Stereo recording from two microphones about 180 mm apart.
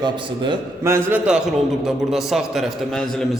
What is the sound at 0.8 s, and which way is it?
Speech, 15° right (ahead or behind).